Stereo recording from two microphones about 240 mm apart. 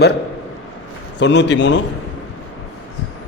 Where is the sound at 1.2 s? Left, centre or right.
Left.